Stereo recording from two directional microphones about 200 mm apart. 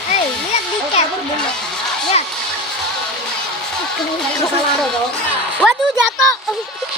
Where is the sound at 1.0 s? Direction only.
30° left (ahead or behind).